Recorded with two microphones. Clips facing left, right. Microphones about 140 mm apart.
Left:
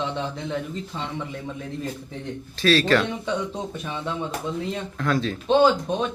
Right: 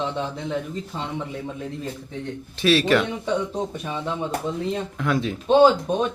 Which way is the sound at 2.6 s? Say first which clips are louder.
Right 1 dB; 15° right (ahead or behind).